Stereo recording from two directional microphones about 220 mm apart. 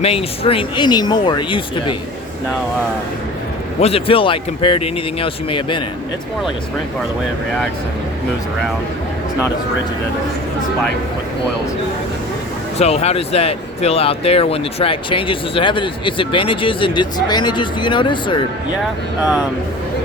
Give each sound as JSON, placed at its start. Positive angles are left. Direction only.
{"t": 0.0, "sound": "speech", "side_deg": 25}
{"t": 3.8, "sound": "speech", "side_deg": 25}
{"t": 12.8, "sound": "speech", "side_deg": 30}